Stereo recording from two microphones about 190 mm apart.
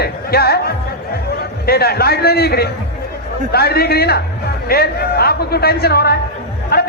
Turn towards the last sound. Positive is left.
turn(degrees=55)  # may be behind; listen again after turning